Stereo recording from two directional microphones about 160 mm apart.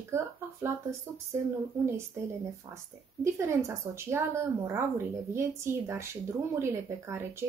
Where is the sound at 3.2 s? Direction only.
20° right (ahead or behind).